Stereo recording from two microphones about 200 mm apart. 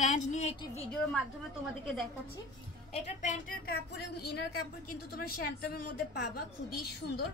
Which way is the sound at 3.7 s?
55° left (ahead or behind).